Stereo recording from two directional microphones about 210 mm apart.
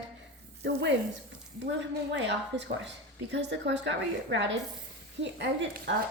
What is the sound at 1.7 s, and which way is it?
A woman's voice, 60° right (ahead or behind).